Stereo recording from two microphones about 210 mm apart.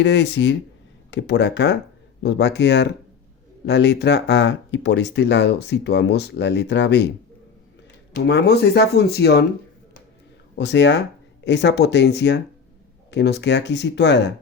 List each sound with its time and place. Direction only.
0.0 s speech: 55° left (ahead or behind)
8.3 s speech: 50° left (ahead or behind)
10.6 s speech: 55° left (ahead or behind)